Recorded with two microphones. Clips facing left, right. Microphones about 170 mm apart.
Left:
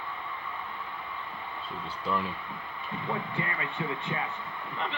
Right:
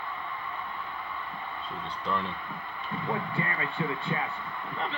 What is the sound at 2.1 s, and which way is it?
Speech, 5° left (ahead or behind).